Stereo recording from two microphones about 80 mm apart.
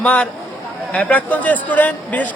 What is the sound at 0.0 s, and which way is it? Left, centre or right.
A man's voice, centre.